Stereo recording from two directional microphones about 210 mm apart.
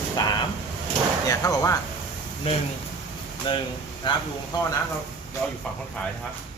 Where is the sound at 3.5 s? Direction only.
25° left (ahead or behind).